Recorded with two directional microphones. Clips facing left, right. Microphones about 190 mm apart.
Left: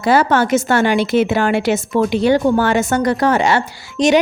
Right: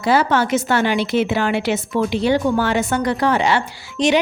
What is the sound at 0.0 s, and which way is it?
A woman's voice, 50° left (ahead or behind).